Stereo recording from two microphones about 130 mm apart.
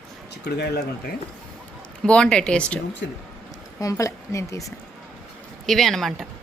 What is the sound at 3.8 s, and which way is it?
Speech, 25° left (ahead or behind).